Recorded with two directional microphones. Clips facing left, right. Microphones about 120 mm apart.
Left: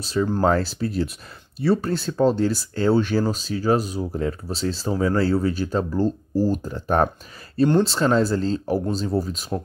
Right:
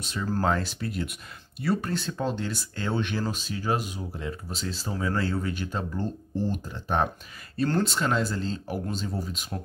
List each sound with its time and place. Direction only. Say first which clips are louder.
0.0 s speech: left 7 dB; 35° left (ahead or behind)
7.6 s speech: left 7 dB; 25° left (ahead or behind)